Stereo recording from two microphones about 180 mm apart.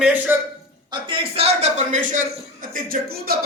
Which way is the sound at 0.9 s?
30° right (ahead or behind).